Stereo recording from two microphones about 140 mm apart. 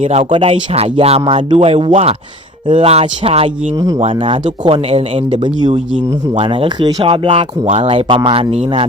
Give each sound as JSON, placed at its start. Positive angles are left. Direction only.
{"t": 0.0, "sound": "speech", "side_deg": -45}
{"t": 3.8, "sound": "speech", "side_deg": -25}
{"t": 4.0, "sound": "speech", "side_deg": -40}